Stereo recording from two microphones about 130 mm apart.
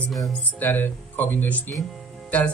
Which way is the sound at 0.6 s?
15° left (ahead or behind).